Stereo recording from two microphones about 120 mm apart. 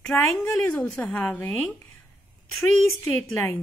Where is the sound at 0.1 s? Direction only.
15° left (ahead or behind).